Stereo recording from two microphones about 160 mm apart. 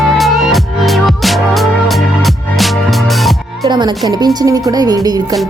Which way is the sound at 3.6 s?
25° right (ahead or behind).